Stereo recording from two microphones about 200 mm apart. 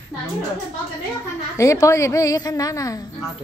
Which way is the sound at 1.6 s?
15° left (ahead or behind).